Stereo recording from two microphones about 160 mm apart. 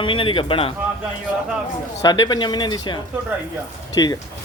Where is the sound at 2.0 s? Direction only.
25° left (ahead or behind).